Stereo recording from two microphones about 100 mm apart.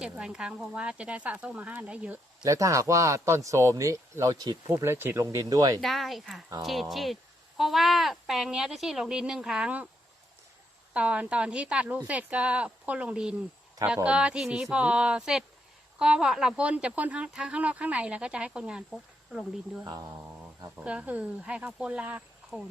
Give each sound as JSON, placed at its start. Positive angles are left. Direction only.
{"t": 0.0, "sound": "speech", "side_deg": -5}
{"t": 2.4, "sound": "speech", "side_deg": -35}
{"t": 4.8, "sound": "speech", "side_deg": -25}
{"t": 5.8, "sound": "speech", "side_deg": 0}
{"t": 10.9, "sound": "speech", "side_deg": -10}
{"t": 18.9, "sound": "speech", "side_deg": 0}
{"t": 19.9, "sound": "speech", "side_deg": -40}
{"t": 20.7, "sound": "speech", "side_deg": -15}